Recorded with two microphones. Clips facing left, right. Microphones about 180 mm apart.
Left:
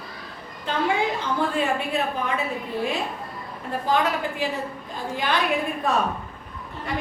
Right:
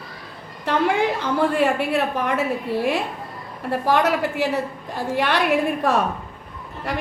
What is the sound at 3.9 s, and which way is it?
A woman's voice, 75° right (ahead or behind).